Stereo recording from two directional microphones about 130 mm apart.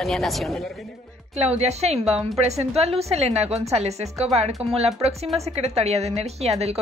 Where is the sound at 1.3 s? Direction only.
55° right (ahead or behind).